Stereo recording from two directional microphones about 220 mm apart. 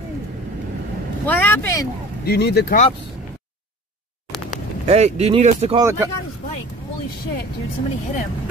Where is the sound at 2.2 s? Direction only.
45° left (ahead or behind).